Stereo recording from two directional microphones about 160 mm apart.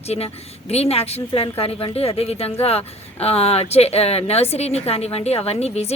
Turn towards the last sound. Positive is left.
turn(degrees=40)  # may be behind; listen again after turning